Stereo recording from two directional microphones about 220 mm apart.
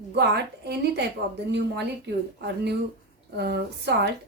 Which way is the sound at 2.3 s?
50° right (ahead or behind).